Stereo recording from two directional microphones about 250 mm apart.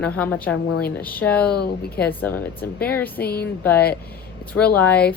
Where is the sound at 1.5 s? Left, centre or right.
Left.